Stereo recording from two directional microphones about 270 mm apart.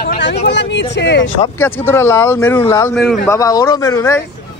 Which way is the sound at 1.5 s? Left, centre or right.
Centre.